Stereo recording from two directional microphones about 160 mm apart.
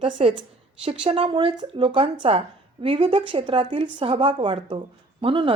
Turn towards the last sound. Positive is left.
turn(degrees=-35)  # may be behind; listen again after turning